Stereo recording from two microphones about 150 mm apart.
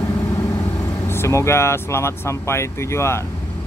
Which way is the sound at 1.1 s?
20° left (ahead or behind).